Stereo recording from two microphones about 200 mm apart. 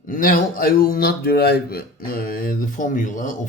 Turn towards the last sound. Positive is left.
turn(degrees=40)  # may be behind; listen again after turning